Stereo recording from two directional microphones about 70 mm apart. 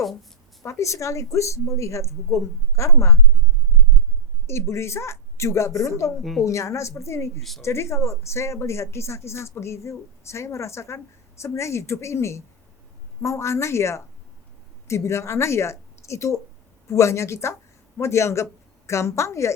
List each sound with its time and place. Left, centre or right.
0.6 s a woman's voice: left
4.4 s a woman's voice: left